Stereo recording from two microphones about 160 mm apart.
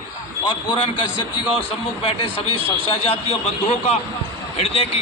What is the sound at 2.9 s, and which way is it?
A man's voice, 40° left (ahead or behind).